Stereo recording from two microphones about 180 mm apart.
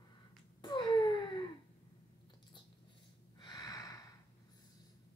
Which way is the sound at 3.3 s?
25° left (ahead or behind).